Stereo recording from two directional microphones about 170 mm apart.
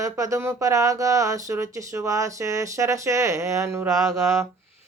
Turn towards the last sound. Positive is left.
turn(degrees=-20)  # may be behind; listen again after turning